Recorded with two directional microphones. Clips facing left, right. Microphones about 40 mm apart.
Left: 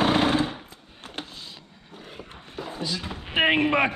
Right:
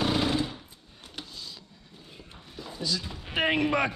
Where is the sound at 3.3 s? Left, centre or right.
Left.